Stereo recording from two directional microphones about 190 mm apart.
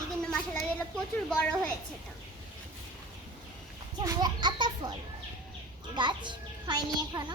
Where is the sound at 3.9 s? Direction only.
20° right (ahead or behind).